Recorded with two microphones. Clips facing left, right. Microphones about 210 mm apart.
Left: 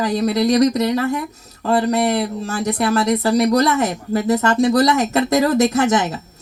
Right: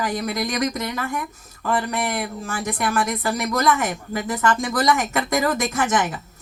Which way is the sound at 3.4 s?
35° left (ahead or behind).